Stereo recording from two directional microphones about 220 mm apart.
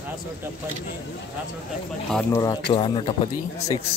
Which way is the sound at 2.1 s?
5° left (ahead or behind).